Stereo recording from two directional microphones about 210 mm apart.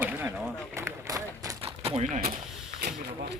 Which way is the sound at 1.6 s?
30° right (ahead or behind).